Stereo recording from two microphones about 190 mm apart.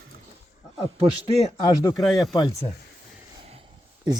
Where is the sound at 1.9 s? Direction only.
Centre (ahead or behind).